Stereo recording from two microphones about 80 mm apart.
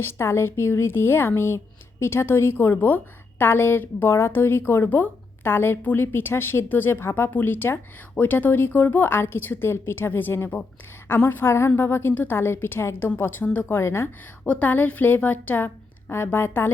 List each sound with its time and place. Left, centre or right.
0.0 s speech: left
14.4 s speech: centre